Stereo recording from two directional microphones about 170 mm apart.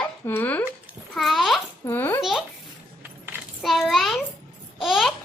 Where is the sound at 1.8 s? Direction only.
10° left (ahead or behind).